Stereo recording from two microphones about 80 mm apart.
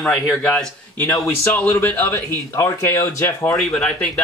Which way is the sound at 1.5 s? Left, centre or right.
Left.